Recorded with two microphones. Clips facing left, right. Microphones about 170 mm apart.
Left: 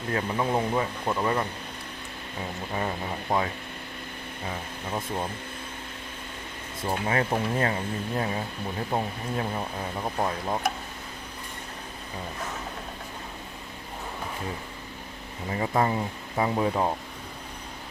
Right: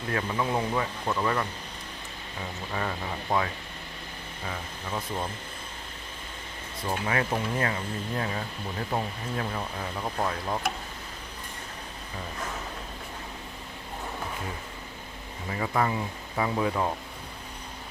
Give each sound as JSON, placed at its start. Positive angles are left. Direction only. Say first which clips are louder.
{"t": 0.1, "sound": "speech", "louder": "left 2 dB", "side_deg": 25}
{"t": 3.3, "sound": "speech", "louder": "left 1 dB", "side_deg": 25}
{"t": 6.8, "sound": "speech", "louder": "left 2 dB", "side_deg": 30}
{"t": 15.4, "sound": "speech", "louder": "left 2 dB", "side_deg": 30}